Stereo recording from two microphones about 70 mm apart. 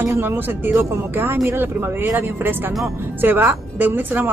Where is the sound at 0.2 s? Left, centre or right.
Right.